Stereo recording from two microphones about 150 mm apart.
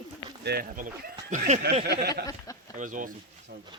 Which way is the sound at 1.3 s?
50° right (ahead or behind).